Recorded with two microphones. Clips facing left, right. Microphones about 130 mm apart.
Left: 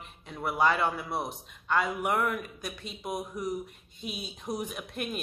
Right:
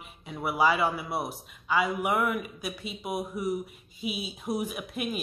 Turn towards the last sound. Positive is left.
turn(degrees=-5)  # may be behind; listen again after turning